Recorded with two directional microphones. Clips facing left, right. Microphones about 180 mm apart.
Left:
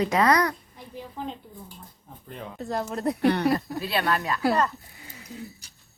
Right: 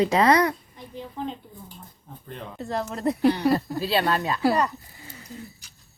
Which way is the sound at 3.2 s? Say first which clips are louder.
Right 1 dB; 60° left (ahead or behind).